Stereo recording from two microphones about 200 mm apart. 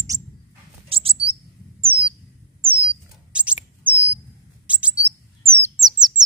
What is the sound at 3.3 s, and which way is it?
Rodents, 5° right (ahead or behind).